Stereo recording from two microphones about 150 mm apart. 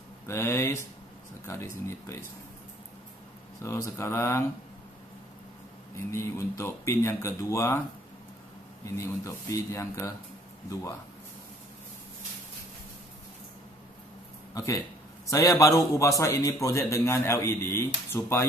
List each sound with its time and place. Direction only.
0.3 s a man's voice: 15° left (ahead or behind)
3.6 s speech: 20° left (ahead or behind)
5.9 s speech: 20° left (ahead or behind)
8.8 s a man's voice: 20° left (ahead or behind)
14.5 s a man's voice: 20° left (ahead or behind)